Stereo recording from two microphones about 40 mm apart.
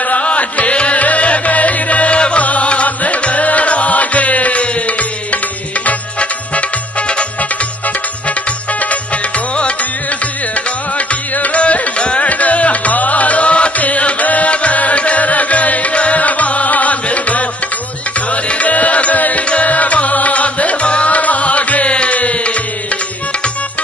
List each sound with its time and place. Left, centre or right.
0.0 s music: left
8.7 s music: left